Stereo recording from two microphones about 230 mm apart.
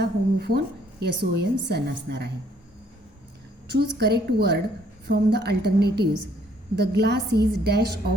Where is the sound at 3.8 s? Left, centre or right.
Right.